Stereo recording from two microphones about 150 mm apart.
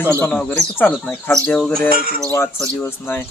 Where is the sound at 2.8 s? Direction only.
15° left (ahead or behind).